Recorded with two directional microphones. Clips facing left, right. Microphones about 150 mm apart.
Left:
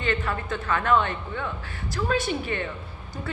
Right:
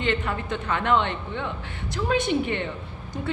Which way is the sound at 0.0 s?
20° right (ahead or behind).